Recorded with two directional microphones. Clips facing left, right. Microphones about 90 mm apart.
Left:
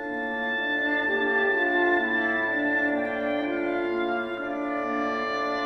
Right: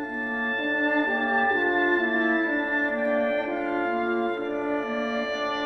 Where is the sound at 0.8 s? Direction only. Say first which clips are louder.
Right 1 dB; 30° right (ahead or behind).